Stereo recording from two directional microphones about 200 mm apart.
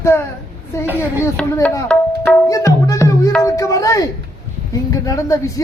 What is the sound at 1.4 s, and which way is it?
Speech, 5° left (ahead or behind).